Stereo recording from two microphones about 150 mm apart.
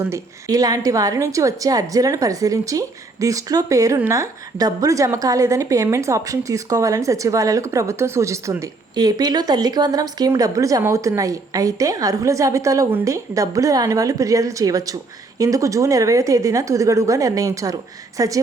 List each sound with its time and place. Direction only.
0.0 s a woman's voice: 20° right (ahead or behind)